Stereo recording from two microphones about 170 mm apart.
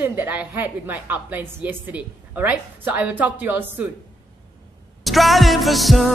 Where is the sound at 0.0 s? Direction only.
10° right (ahead or behind).